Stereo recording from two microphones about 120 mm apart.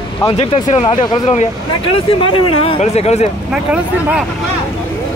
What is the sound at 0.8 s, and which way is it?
Speech, 40° left (ahead or behind).